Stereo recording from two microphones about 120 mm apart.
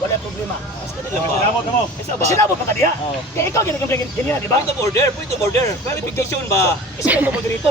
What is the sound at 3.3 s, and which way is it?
Speech, 20° left (ahead or behind).